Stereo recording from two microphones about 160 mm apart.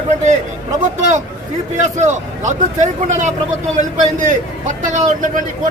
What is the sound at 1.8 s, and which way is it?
A man's voice, 50° right (ahead or behind).